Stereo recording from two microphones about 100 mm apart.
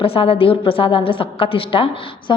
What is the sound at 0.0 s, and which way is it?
A woman's voice, 70° left (ahead or behind).